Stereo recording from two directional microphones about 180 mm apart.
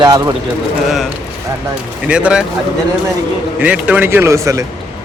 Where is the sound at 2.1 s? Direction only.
5° right (ahead or behind).